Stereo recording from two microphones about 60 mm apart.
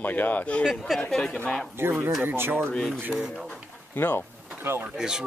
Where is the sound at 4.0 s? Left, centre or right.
Left.